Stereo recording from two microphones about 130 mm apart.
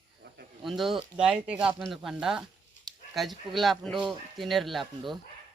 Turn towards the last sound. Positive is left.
turn(degrees=0)  # may be behind; listen again after turning